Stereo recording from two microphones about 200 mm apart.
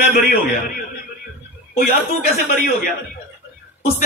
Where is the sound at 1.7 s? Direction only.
45° left (ahead or behind).